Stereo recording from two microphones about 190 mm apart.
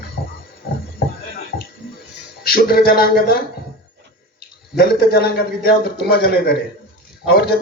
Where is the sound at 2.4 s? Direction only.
55° left (ahead or behind).